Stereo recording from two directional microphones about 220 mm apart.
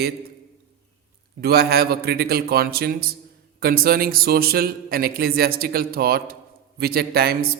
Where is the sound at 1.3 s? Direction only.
45° right (ahead or behind).